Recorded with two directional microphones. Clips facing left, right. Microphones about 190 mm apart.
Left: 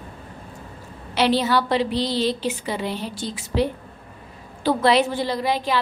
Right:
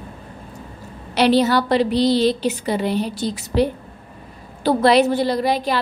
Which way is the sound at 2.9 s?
65° right (ahead or behind).